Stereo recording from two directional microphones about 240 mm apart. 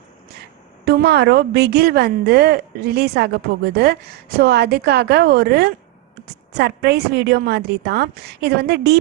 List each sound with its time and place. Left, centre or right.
0.9 s a woman's voice: right